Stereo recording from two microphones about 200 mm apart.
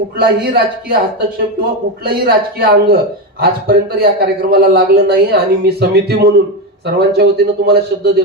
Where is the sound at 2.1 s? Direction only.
50° right (ahead or behind).